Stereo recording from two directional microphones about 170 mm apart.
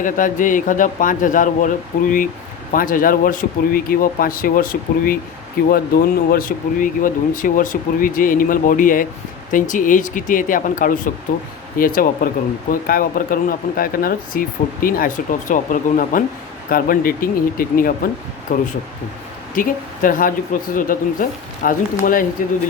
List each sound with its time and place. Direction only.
0.0 s speech: 50° left (ahead or behind)